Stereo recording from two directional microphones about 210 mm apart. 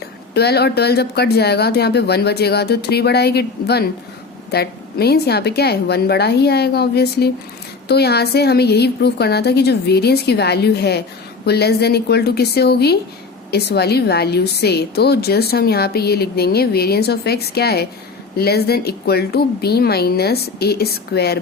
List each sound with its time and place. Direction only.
0.3 s a woman's voice: 50° left (ahead or behind)